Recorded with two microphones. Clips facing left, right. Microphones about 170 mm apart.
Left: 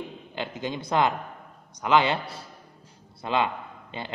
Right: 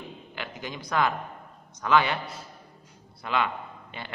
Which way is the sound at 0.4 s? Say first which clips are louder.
Left 6 dB; 25° left (ahead or behind).